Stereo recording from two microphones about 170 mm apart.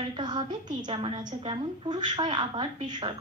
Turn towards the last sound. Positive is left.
turn(degrees=-25)  # may be behind; listen again after turning